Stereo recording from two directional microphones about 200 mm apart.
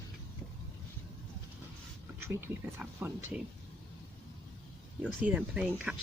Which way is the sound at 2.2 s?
10° right (ahead or behind).